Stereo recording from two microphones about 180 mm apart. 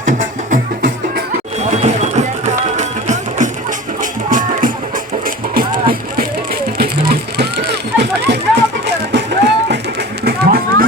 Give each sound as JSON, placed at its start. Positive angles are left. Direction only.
{"t": 0.0, "sound": "music", "side_deg": -45}
{"t": 1.8, "sound": "music", "side_deg": -40}
{"t": 10.2, "sound": "a sound", "side_deg": -55}